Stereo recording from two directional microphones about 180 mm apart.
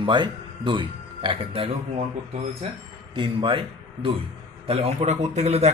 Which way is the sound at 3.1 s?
30° right (ahead or behind).